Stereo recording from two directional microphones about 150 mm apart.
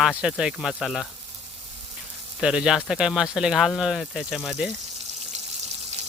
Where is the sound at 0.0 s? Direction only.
5° right (ahead or behind).